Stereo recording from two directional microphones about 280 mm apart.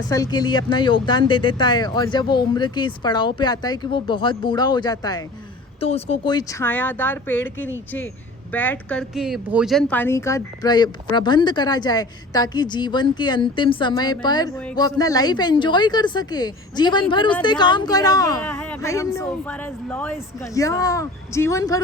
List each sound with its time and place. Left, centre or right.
0.1 s speech: centre